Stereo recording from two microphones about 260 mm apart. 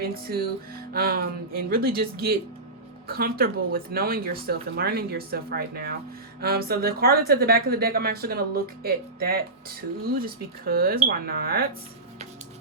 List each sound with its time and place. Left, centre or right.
0.0 s speech: right